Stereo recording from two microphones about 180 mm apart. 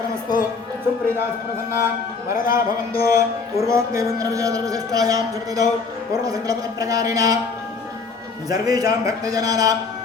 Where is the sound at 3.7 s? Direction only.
15° right (ahead or behind).